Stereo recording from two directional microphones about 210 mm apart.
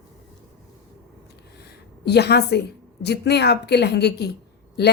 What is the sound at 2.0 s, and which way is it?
Speech, 50° left (ahead or behind).